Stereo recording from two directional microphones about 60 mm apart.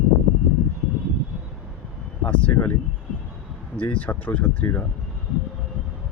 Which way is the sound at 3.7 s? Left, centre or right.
Left.